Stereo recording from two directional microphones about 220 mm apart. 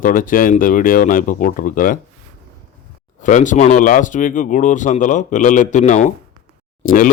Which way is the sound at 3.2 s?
35° left (ahead or behind).